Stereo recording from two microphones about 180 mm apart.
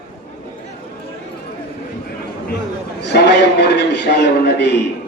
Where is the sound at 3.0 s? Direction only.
70° left (ahead or behind).